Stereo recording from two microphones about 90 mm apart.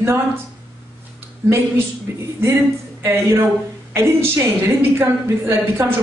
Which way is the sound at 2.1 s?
30° right (ahead or behind).